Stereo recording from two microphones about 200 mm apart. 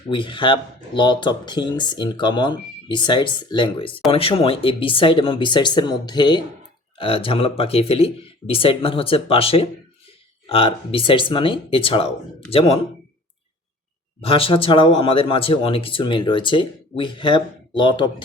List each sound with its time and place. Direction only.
0.1 s speech: 25° left (ahead or behind)
14.2 s speech: 30° left (ahead or behind)